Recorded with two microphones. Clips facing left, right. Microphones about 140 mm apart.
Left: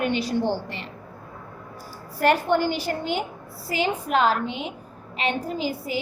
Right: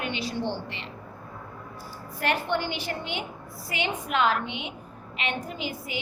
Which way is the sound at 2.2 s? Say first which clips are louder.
Left 7 dB; 40° left (ahead or behind).